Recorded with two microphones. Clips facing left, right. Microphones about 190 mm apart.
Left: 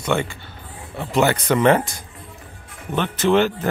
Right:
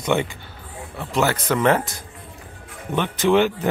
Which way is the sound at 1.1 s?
Centre (ahead or behind).